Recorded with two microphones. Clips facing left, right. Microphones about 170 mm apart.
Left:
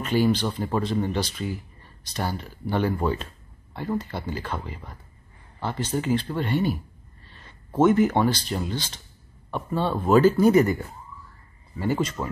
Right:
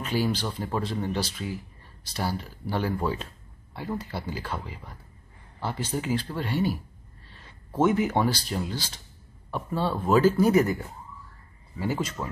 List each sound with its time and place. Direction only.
0.0 s speech: 5° right (ahead or behind)
7.8 s speech: 5° right (ahead or behind)